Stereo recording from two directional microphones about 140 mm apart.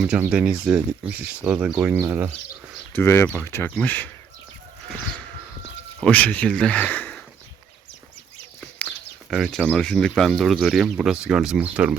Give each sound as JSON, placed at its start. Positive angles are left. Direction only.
{"t": 0.3, "sound": "speech", "side_deg": -10}
{"t": 2.9, "sound": "speech", "side_deg": 15}
{"t": 6.0, "sound": "speech", "side_deg": 10}
{"t": 9.3, "sound": "speech", "side_deg": 0}